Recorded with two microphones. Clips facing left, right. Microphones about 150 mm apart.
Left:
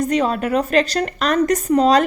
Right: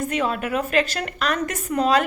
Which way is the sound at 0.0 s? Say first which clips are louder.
Left 5 dB; 40° left (ahead or behind).